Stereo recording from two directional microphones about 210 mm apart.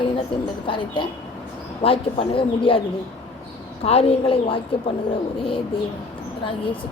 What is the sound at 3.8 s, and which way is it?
Speech, 25° left (ahead or behind).